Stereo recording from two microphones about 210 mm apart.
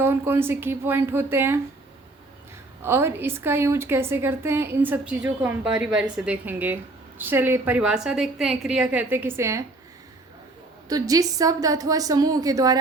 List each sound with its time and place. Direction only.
0.0 s a woman's voice: 10° right (ahead or behind)
2.8 s a woman's voice: 10° right (ahead or behind)
10.8 s a woman's voice: 15° right (ahead or behind)